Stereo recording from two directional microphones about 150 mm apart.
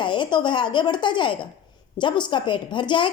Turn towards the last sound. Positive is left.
turn(degrees=30)  # may be behind; listen again after turning